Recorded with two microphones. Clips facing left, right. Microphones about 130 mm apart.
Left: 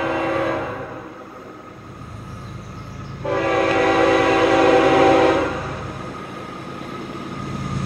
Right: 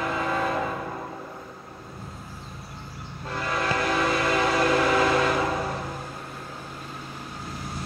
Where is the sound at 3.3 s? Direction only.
70° left (ahead or behind).